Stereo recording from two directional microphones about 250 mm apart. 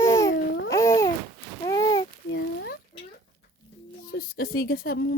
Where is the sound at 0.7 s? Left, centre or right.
Centre.